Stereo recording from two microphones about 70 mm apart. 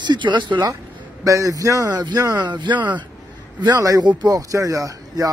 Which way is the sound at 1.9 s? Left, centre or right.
Right.